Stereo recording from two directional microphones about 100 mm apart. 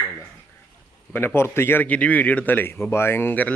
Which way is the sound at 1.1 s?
25° left (ahead or behind).